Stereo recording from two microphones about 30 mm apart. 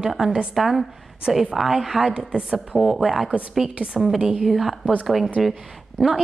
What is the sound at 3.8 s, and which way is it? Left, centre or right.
Speech, right.